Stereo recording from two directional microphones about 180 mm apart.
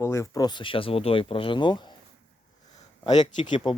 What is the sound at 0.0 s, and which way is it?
Speech, 15° left (ahead or behind).